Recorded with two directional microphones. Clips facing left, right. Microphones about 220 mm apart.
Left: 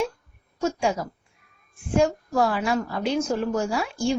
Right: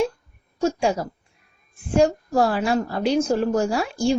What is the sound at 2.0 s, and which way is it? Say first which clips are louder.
A woman's voice: right 3 dB; 35° right (ahead or behind).